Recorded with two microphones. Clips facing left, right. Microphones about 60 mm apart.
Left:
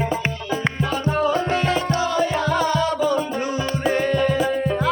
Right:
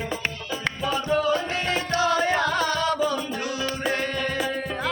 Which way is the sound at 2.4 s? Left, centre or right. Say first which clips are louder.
Left 3 dB; centre.